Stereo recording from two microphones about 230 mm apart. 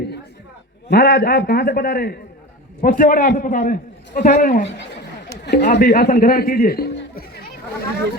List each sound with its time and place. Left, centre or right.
0.9 s a man's voice: left
5.3 s a sound: left
5.7 s a man's voice: left